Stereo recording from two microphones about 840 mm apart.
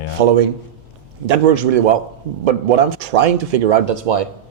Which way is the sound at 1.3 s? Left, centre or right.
Right.